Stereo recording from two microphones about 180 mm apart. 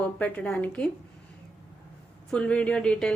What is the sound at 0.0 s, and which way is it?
Speech, 5° left (ahead or behind).